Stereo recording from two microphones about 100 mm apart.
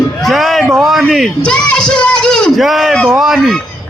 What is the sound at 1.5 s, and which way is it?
Speech, 10° left (ahead or behind).